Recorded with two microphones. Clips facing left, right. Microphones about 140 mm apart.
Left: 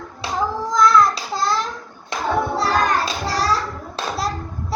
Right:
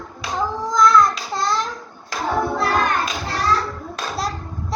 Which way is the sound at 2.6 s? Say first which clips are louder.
Left 1 dB; 35° left (ahead or behind).